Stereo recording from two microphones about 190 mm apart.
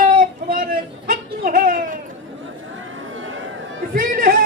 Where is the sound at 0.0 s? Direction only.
45° right (ahead or behind).